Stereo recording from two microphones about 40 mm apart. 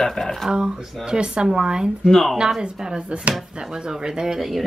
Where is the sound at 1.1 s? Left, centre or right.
Right.